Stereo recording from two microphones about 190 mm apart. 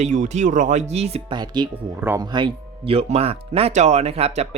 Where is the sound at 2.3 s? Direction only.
25° right (ahead or behind).